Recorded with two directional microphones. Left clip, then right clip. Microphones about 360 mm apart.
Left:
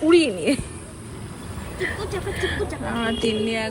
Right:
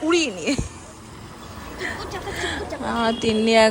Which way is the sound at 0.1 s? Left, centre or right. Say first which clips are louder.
Left 4 dB; centre.